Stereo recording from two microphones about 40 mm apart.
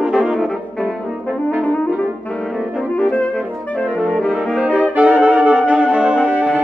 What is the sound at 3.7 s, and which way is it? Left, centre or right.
Saxophone, left.